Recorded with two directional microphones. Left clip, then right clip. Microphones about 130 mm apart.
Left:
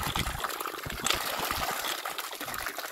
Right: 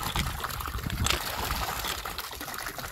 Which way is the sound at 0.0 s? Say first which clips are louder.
Even; 15° left (ahead or behind).